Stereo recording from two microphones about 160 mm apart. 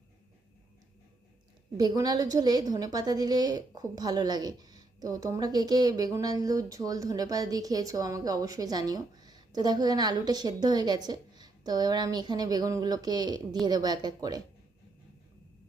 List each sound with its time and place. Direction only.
1.7 s a woman's voice: 25° right (ahead or behind)